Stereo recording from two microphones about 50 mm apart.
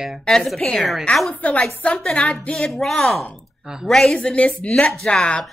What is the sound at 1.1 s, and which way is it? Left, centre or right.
Speech, left.